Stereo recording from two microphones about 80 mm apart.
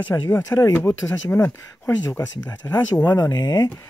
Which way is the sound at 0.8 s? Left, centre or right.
Left.